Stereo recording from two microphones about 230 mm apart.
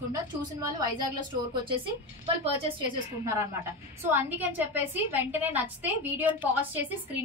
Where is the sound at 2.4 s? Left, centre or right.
Right.